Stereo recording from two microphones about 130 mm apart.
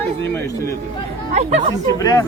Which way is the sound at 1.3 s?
60° right (ahead or behind).